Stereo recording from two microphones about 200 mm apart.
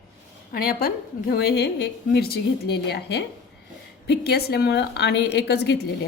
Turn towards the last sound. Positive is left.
turn(degrees=55)  # may be behind; listen again after turning